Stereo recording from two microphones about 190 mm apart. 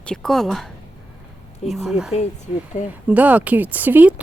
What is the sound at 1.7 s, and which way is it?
Speech, centre (ahead or behind).